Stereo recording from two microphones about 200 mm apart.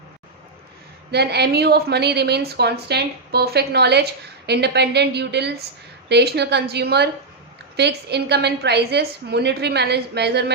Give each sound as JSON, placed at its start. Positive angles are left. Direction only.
{"t": 1.1, "sound": "a woman's voice", "side_deg": -55}